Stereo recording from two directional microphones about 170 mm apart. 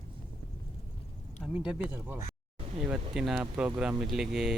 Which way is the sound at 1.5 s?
5° right (ahead or behind).